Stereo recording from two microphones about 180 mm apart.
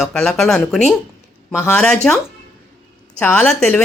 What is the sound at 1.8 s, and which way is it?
A woman's voice, 5° left (ahead or behind).